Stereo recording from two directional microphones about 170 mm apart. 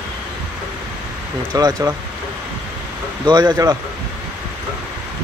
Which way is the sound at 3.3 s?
25° right (ahead or behind).